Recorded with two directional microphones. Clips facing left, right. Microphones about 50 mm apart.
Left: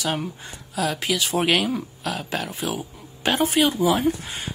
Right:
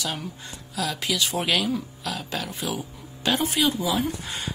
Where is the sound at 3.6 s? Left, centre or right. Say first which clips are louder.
Left 4 dB; left.